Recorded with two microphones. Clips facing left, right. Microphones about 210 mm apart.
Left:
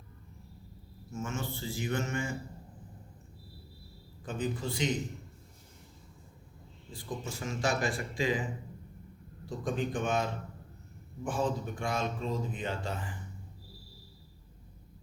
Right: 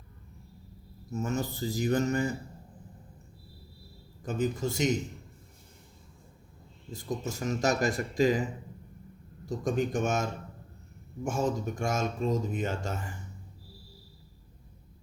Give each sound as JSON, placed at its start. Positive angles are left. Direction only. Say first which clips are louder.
{"t": 1.1, "sound": "speech", "louder": "right 5 dB", "side_deg": -40}
{"t": 4.2, "sound": "speech", "louder": "right 5 dB", "side_deg": -40}
{"t": 6.9, "sound": "speech", "louder": "right 5 dB", "side_deg": -40}
{"t": 9.5, "sound": "speech", "louder": "right 4 dB", "side_deg": -45}